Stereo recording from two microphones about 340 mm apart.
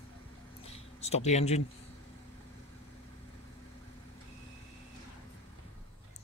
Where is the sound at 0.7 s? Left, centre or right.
Centre.